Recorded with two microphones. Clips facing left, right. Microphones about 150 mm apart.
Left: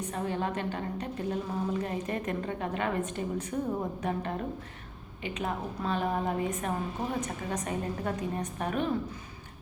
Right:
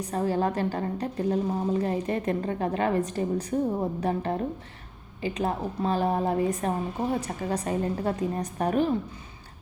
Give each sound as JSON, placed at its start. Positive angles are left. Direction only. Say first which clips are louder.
{"t": 0.0, "sound": "a woman's voice", "louder": "right 6 dB", "side_deg": -35}